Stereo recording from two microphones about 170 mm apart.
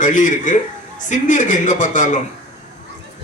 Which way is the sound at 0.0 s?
50° left (ahead or behind).